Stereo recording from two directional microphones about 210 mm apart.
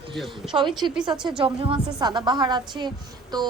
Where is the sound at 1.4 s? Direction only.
25° right (ahead or behind).